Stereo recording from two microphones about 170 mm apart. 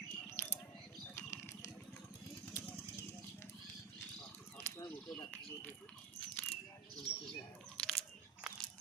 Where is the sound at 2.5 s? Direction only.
15° left (ahead or behind).